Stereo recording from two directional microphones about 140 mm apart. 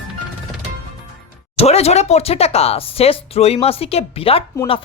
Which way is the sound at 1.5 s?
50° left (ahead or behind).